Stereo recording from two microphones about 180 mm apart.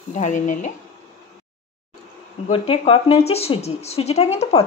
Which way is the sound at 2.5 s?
30° left (ahead or behind).